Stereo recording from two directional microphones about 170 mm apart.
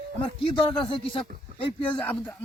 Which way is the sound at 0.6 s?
30° left (ahead or behind).